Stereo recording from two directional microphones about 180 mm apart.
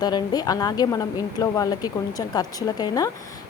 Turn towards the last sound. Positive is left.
turn(degrees=20)  # may be behind; listen again after turning